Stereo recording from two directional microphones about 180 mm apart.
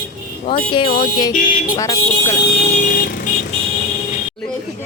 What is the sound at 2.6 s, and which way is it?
Vehicle, 40° left (ahead or behind).